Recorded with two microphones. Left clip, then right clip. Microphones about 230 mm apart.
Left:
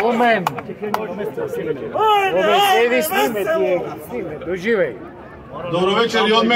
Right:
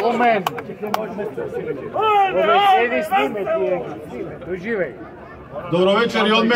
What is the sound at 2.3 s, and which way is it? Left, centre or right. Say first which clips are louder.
A man's voice: even; left.